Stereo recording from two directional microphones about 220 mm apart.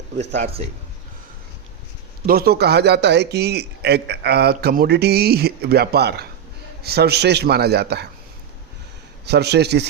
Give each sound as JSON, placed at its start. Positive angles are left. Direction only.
{"t": 0.3, "sound": "a man's voice", "side_deg": -30}
{"t": 2.2, "sound": "a man's voice", "side_deg": -45}
{"t": 9.2, "sound": "a man's voice", "side_deg": -50}